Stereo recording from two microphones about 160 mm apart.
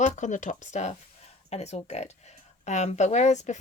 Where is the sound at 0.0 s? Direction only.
50° left (ahead or behind).